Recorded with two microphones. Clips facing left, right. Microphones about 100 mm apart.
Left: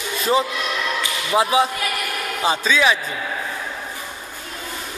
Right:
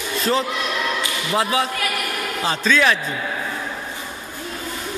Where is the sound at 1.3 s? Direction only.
15° left (ahead or behind).